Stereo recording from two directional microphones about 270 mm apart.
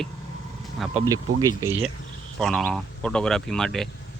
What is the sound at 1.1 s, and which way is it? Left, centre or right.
Speech, centre.